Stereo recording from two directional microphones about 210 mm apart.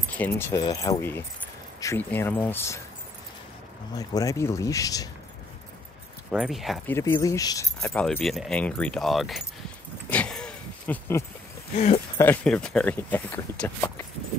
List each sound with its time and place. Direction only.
0.4 s speech: 15° left (ahead or behind)
3.9 s speech: 15° left (ahead or behind)
6.3 s speech: centre (ahead or behind)
6.9 s speech: 10° left (ahead or behind)
7.8 s speech: 5° left (ahead or behind)
10.0 s a sound: 5° left (ahead or behind)
11.7 s speech: 35° left (ahead or behind)
12.2 s speech: 10° left (ahead or behind)